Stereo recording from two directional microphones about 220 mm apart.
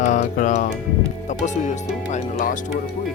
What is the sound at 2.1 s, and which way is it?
Speech, 35° left (ahead or behind).